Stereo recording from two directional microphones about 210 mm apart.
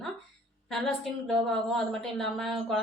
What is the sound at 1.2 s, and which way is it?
Speech, centre (ahead or behind).